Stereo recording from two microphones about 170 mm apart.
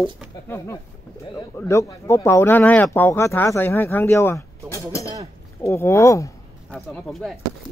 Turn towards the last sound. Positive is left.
turn(degrees=0)  # may be behind; listen again after turning